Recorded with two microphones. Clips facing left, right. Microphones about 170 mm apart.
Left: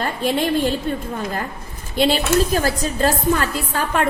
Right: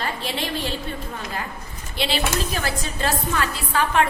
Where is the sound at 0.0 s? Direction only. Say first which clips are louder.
Left 7 dB; 50° left (ahead or behind).